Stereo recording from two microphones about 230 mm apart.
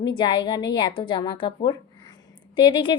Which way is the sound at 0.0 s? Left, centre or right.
Centre.